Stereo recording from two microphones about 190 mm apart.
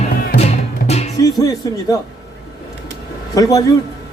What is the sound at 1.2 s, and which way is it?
Speech, 20° left (ahead or behind).